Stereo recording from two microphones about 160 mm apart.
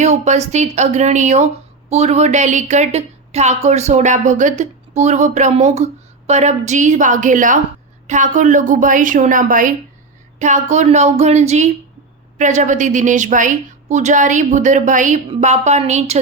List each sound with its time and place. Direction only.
0.0 s a woman's voice: 45° right (ahead or behind)